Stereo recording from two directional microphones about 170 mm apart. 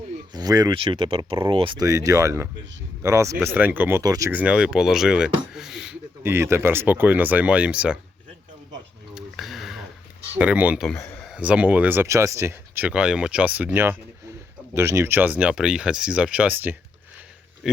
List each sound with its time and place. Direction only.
0.3 s speech: 20° right (ahead or behind)
4.3 s speech: 10° right (ahead or behind)
5.5 s a sound: centre (ahead or behind)
6.2 s speech: 15° right (ahead or behind)
9.1 s a sound: centre (ahead or behind)
10.3 s speech: 10° right (ahead or behind)
10.8 s speech: 10° left (ahead or behind)
11.3 s speech: 5° right (ahead or behind)